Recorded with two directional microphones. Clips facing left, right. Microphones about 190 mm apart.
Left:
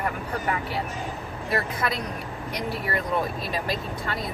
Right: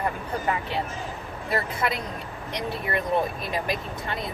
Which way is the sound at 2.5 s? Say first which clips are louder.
Even; 20° right (ahead or behind).